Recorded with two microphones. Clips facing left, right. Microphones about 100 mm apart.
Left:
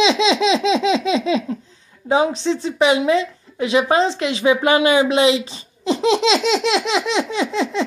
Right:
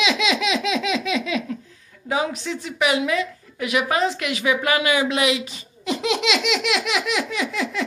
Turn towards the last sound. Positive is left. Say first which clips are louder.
# left 5 dB
turn(degrees=25)  # may be behind; listen again after turning